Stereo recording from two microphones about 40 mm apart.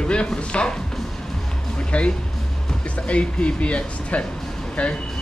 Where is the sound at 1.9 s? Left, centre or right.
Left.